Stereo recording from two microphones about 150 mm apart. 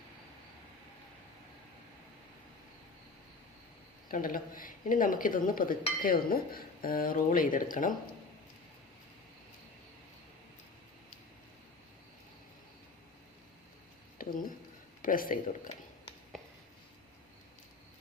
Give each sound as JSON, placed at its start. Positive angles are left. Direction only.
{"t": 4.1, "sound": "speech", "side_deg": 65}
{"t": 14.2, "sound": "a sound", "side_deg": 70}
{"t": 15.0, "sound": "speech", "side_deg": 70}